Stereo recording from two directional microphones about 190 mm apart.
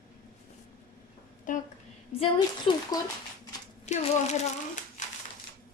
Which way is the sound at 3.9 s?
40° left (ahead or behind).